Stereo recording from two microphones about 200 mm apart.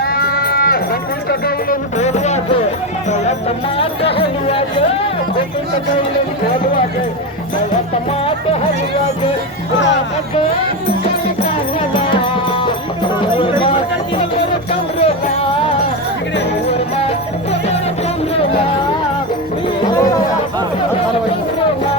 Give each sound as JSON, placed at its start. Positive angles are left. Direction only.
{"t": 0.0, "sound": "livestock", "side_deg": 50}
{"t": 1.3, "sound": "a sound", "side_deg": 50}
{"t": 2.0, "sound": "music", "side_deg": 35}
{"t": 3.8, "sound": "speech", "side_deg": 30}
{"t": 12.1, "sound": "music", "side_deg": 25}
{"t": 16.6, "sound": "music", "side_deg": 30}